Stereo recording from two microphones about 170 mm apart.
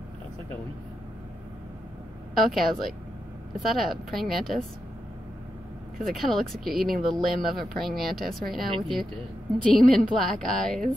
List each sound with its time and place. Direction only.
2.5 s speech: centre (ahead or behind)
5.9 s speech: centre (ahead or behind)
8.6 s speech: 30° right (ahead or behind)
9.7 s speech: centre (ahead or behind)